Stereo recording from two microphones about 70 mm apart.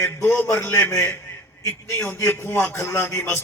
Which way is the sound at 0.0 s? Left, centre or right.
Left.